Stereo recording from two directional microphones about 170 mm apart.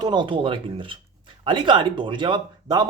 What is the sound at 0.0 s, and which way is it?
Speech, 25° right (ahead or behind).